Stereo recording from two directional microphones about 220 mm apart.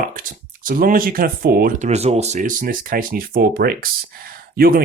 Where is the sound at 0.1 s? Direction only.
40° right (ahead or behind).